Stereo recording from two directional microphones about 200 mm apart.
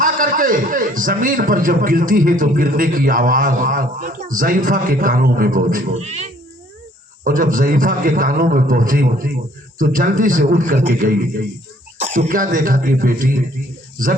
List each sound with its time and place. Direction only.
0.0 s a man's voice: 40° right (ahead or behind)